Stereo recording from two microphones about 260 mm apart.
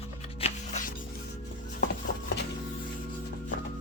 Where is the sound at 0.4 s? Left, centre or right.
Left.